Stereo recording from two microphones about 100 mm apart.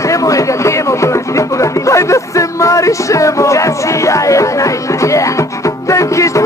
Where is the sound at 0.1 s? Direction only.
35° left (ahead or behind).